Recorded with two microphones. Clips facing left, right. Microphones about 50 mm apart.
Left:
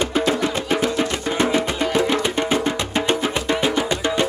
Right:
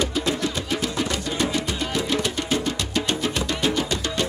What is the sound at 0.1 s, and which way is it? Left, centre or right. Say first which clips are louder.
Music: left 5 dB; left.